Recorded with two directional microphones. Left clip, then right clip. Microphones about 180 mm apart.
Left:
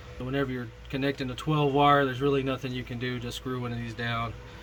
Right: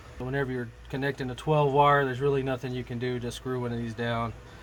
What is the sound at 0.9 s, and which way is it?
Speech, 45° right (ahead or behind).